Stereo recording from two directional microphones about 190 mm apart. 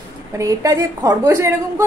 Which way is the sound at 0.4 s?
15° right (ahead or behind).